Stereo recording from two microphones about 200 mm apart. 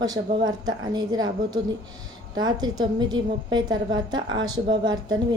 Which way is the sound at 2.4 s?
20° right (ahead or behind).